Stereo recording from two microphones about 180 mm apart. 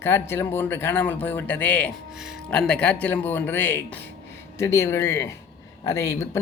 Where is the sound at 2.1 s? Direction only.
Centre (ahead or behind).